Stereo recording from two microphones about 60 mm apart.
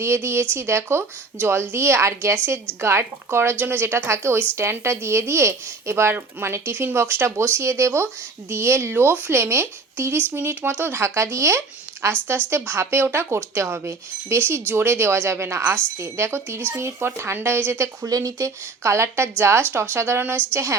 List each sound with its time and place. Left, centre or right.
0.0 s a woman's voice: right
11.0 s a woman's voice: right
18.1 s a woman's voice: right